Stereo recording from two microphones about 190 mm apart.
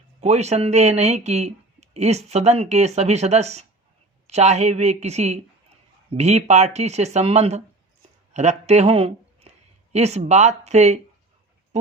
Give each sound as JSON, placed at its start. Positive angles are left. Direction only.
{"t": 0.2, "sound": "speech", "side_deg": -35}